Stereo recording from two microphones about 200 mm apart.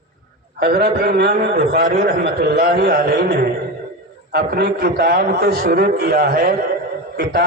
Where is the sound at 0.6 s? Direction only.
50° right (ahead or behind).